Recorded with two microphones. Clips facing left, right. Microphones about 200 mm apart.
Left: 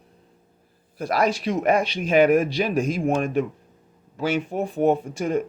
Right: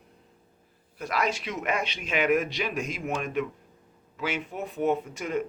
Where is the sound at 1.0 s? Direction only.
35° left (ahead or behind).